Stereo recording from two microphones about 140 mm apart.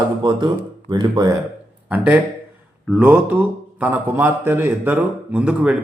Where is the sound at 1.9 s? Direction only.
10° right (ahead or behind).